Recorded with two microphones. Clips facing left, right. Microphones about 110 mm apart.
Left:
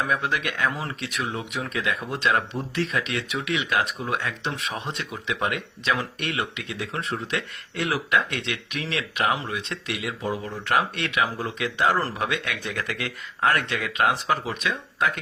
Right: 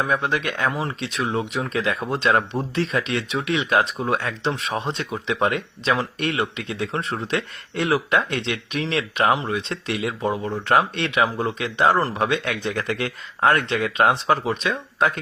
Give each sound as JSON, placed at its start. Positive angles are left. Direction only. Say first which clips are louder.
{"t": 0.1, "sound": "speech", "louder": "right 3 dB", "side_deg": -30}
{"t": 11.9, "sound": "speech", "louder": "right 4 dB", "side_deg": -20}
{"t": 12.2, "sound": "speech", "louder": "right 5 dB", "side_deg": -30}